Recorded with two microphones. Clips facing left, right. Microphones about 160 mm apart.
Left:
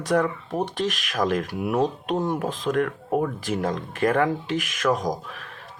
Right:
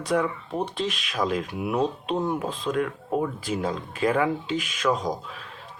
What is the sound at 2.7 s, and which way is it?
Speech, 50° left (ahead or behind).